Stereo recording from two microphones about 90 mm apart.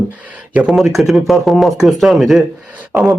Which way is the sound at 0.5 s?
10° right (ahead or behind).